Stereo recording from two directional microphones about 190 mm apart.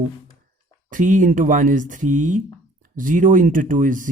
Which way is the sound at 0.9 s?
45° right (ahead or behind).